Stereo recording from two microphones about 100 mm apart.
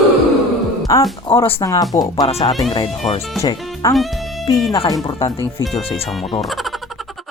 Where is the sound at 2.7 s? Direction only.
65° left (ahead or behind).